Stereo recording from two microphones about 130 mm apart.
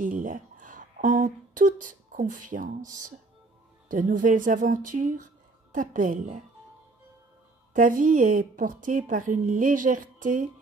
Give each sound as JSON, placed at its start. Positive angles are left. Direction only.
{"t": 0.0, "sound": "speech", "side_deg": -90}
{"t": 3.9, "sound": "a woman's voice", "side_deg": -90}
{"t": 7.7, "sound": "a woman's voice", "side_deg": -90}